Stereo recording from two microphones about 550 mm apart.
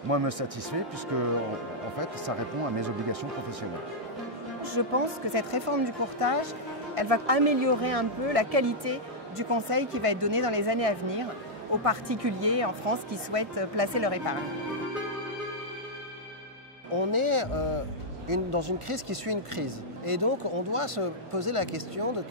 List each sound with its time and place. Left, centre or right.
0.1 s speech: right
2.8 s speech: right
4.6 s speech: right
7.0 s speech: right
16.9 s speech: right